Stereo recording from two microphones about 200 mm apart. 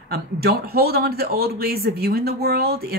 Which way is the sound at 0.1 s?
50° right (ahead or behind).